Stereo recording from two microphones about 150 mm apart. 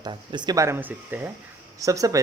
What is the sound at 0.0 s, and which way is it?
Speech, 30° right (ahead or behind).